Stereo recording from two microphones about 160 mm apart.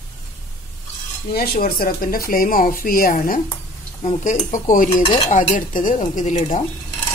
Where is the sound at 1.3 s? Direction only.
70° left (ahead or behind); by 6.6 s 45° left (ahead or behind).